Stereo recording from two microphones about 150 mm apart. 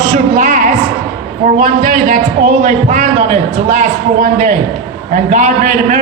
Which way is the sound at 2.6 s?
55° right (ahead or behind).